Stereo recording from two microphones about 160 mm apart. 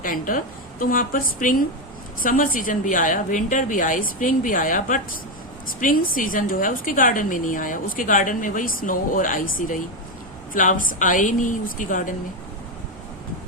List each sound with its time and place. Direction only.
0.0 s a woman's voice: 60° left (ahead or behind)